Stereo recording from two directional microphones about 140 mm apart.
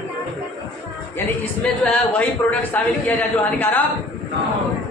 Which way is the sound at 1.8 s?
10° left (ahead or behind).